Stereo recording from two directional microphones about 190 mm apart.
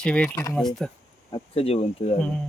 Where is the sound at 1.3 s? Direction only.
30° left (ahead or behind).